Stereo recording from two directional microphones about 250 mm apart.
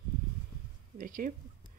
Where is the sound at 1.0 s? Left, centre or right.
Right.